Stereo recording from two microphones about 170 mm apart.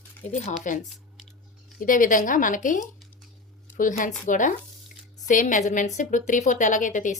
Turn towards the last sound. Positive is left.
turn(degrees=50)  # may be behind; listen again after turning